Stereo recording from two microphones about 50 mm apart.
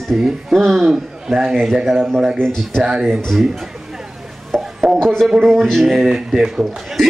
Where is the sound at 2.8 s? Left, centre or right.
Centre.